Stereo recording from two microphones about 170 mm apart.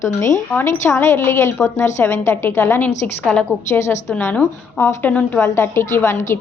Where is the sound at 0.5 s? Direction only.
15° left (ahead or behind).